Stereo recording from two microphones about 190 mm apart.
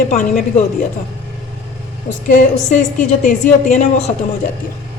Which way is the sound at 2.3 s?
45° left (ahead or behind).